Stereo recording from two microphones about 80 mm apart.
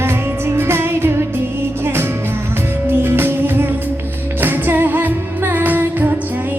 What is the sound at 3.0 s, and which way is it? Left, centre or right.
Music, right.